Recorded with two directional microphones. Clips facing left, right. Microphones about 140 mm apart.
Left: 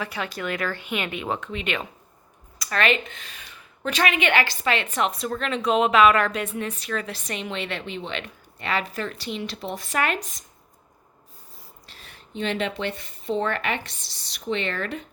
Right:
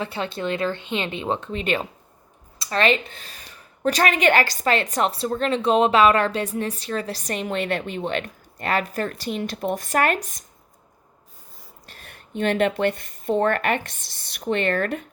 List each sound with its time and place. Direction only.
0.0 s a woman's voice: 30° right (ahead or behind); by 10.4 s 50° right (ahead or behind)
11.9 s speech: 50° right (ahead or behind)